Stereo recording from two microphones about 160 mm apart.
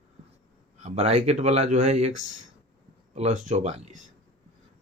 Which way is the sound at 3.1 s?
45° right (ahead or behind).